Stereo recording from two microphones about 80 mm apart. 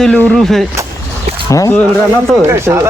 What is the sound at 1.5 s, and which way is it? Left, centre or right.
Speech, left.